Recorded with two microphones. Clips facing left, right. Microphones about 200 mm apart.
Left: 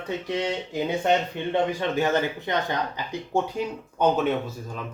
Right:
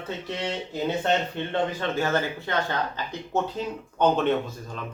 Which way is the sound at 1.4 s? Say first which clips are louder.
Left 2 dB; 15° left (ahead or behind).